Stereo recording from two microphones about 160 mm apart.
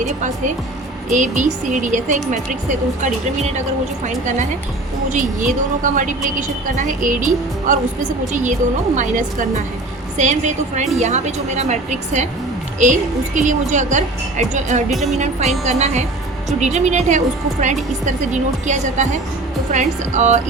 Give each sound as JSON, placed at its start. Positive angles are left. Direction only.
{"t": 0.0, "sound": "a woman's voice", "side_deg": -50}
{"t": 5.1, "sound": "a woman's voice", "side_deg": -55}
{"t": 9.0, "sound": "a woman's voice", "side_deg": -55}
{"t": 14.8, "sound": "music", "side_deg": 0}
{"t": 15.2, "sound": "a woman's voice", "side_deg": -45}